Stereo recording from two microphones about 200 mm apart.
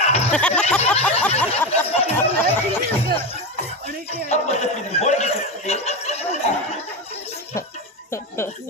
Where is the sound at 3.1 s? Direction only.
30° left (ahead or behind).